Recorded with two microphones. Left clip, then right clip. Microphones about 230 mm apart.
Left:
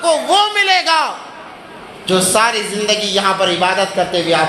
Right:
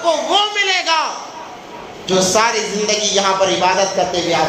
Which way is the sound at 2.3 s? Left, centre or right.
Left.